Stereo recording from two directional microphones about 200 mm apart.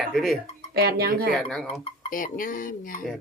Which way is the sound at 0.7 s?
55° right (ahead or behind).